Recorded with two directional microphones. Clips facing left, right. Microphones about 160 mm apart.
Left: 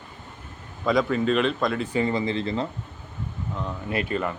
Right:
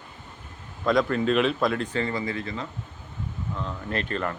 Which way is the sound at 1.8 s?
15° left (ahead or behind).